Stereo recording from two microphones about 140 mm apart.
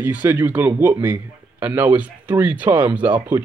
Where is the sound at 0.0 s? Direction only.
15° right (ahead or behind).